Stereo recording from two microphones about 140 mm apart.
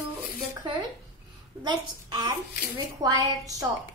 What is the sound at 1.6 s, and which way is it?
A woman's voice, 30° right (ahead or behind).